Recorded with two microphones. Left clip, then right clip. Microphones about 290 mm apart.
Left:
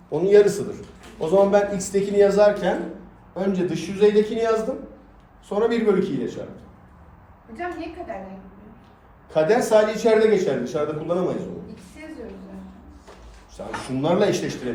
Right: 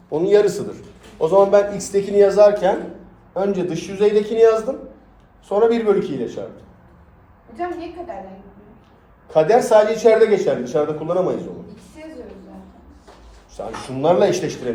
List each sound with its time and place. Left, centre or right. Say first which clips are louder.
0.1 s a man's voice: right 1 dB; centre
1.2 s speech: right 4 dB; right
9.3 s speech: right 4 dB; right
13.8 s speech: right 5 dB; right